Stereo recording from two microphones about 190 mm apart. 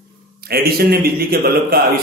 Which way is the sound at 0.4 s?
55° right (ahead or behind).